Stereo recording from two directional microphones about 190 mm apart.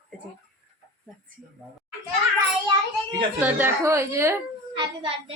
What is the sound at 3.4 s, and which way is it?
A child's voice, 10° right (ahead or behind).